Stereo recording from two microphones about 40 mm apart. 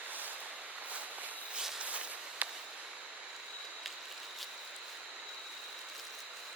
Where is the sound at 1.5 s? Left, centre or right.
Centre.